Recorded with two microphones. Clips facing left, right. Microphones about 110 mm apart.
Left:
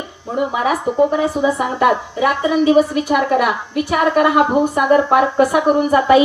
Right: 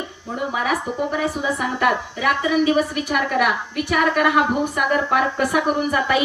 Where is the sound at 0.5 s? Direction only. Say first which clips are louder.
Left 5 dB; 25° left (ahead or behind).